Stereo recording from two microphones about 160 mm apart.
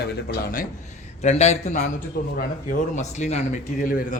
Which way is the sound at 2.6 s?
45° left (ahead or behind).